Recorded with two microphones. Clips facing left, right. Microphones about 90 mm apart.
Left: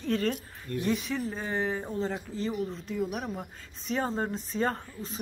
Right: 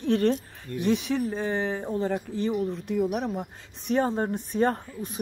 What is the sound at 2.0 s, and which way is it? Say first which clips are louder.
Speech: right 5 dB; 60° right (ahead or behind).